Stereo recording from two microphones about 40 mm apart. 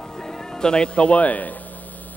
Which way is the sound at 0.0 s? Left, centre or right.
Centre.